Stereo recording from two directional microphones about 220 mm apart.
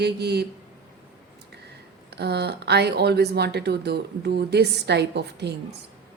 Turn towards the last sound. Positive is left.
turn(degrees=-50)  # may be behind; listen again after turning